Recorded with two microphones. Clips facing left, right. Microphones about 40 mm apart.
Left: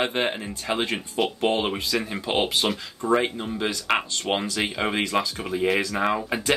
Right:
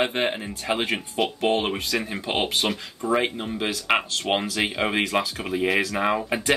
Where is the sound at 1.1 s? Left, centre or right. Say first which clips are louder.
Even; centre.